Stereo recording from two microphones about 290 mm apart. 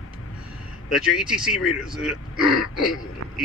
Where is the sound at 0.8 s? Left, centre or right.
Centre.